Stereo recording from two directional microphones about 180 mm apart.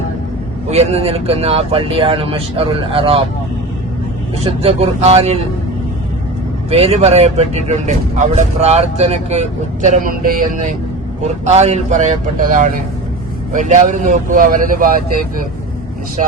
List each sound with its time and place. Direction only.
0.7 s speech: 35° right (ahead or behind)
4.4 s speech: 35° right (ahead or behind)
6.7 s speech: 35° right (ahead or behind)
11.2 s speech: 40° right (ahead or behind)